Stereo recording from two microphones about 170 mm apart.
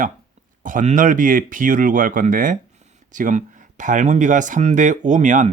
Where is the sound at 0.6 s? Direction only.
50° right (ahead or behind).